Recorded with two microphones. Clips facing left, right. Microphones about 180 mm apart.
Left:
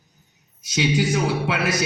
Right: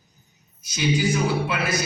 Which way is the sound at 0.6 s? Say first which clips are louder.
Left 2 dB; 70° left (ahead or behind).